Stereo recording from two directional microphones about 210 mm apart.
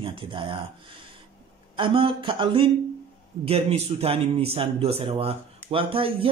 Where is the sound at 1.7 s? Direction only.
25° right (ahead or behind).